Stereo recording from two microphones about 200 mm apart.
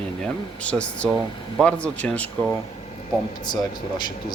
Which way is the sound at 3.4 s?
20° left (ahead or behind).